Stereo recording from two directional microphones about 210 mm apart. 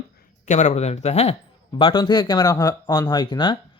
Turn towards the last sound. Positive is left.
turn(degrees=20)  # may be behind; listen again after turning